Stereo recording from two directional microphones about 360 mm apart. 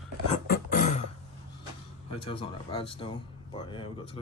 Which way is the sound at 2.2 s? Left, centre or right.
Centre.